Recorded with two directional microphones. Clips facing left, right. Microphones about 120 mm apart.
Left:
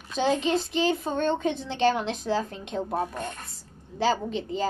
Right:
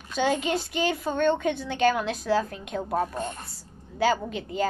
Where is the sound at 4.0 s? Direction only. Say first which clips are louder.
Right 1 dB; 30° left (ahead or behind).